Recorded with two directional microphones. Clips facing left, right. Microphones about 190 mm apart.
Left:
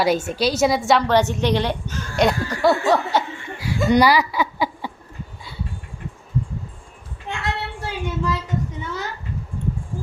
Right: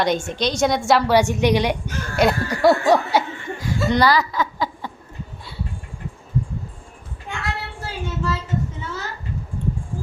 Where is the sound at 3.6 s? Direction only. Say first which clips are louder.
Left 3 dB; 10° left (ahead or behind).